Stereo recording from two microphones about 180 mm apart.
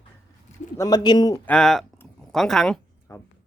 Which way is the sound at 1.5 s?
5° left (ahead or behind).